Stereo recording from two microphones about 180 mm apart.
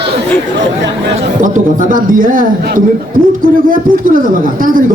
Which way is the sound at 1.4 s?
45° right (ahead or behind).